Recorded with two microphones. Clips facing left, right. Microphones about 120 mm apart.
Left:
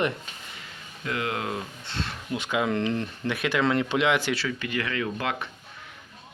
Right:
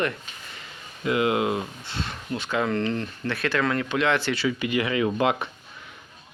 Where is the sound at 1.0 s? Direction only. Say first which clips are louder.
Right 7 dB; 15° right (ahead or behind).